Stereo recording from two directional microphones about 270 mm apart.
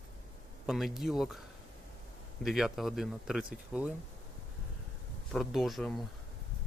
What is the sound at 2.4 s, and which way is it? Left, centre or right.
Speech, centre.